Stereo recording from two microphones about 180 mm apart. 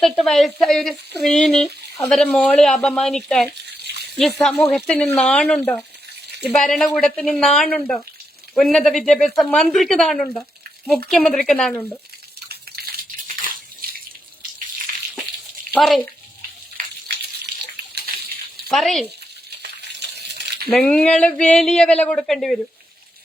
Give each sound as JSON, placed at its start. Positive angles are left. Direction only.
{"t": 0.0, "sound": "speech", "side_deg": 0}
{"t": 3.7, "sound": "a sound", "side_deg": -65}
{"t": 4.2, "sound": "speech", "side_deg": 0}
{"t": 12.5, "sound": "a sound", "side_deg": -60}
{"t": 15.7, "sound": "speech", "side_deg": 0}
{"t": 17.9, "sound": "a sound", "side_deg": -60}
{"t": 18.7, "sound": "speech", "side_deg": 0}
{"t": 19.5, "sound": "coin", "side_deg": -70}
{"t": 20.7, "sound": "speech", "side_deg": 5}